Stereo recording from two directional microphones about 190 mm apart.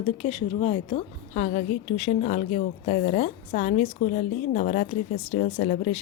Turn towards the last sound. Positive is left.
turn(degrees=35)  # may be behind; listen again after turning